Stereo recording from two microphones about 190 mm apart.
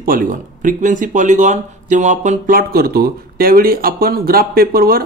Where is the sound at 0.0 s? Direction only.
45° right (ahead or behind).